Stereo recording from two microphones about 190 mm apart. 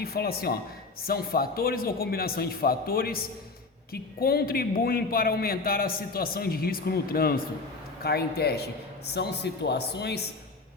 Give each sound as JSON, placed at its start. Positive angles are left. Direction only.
{"t": 0.0, "sound": "a man's voice", "side_deg": 55}